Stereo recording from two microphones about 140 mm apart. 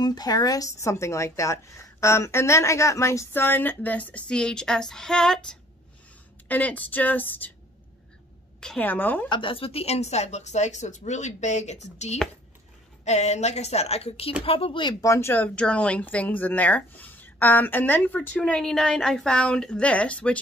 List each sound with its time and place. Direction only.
0.0 s a woman's voice: 30° left (ahead or behind); by 7.5 s 15° left (ahead or behind)
8.5 s speech: 10° left (ahead or behind)
9.3 s speech: 40° left (ahead or behind); by 20.3 s 10° left (ahead or behind)